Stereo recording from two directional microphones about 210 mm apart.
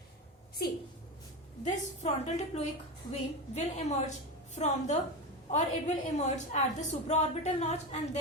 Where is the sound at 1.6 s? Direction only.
30° left (ahead or behind).